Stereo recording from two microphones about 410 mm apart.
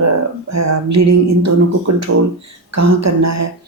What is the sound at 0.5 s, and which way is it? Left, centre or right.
Speech, right.